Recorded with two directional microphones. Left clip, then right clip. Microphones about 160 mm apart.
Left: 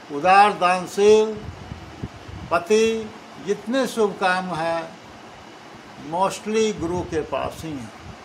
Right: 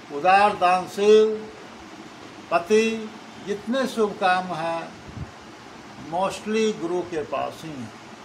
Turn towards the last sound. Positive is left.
turn(degrees=40)  # may be behind; listen again after turning